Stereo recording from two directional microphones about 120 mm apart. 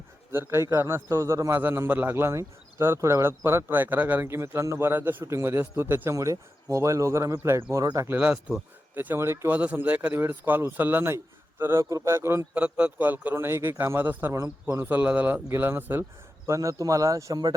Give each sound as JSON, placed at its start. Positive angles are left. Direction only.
{"t": 0.3, "sound": "speech", "side_deg": -20}
{"t": 8.0, "sound": "speech", "side_deg": -10}
{"t": 9.0, "sound": "speech", "side_deg": -20}
{"t": 12.5, "sound": "speech", "side_deg": -10}